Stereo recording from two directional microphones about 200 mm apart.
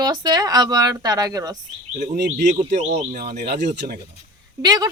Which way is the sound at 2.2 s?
35° right (ahead or behind).